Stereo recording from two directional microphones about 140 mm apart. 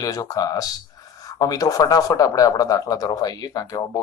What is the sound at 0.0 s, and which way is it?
Speech, 25° left (ahead or behind).